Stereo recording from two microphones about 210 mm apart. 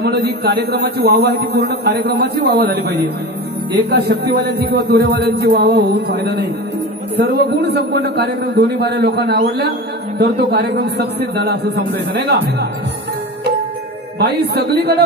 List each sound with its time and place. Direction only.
0.0 s a man's voice: 50° right (ahead or behind)
3.9 s a man's voice: 50° right (ahead or behind)
14.2 s a man's voice: 50° right (ahead or behind)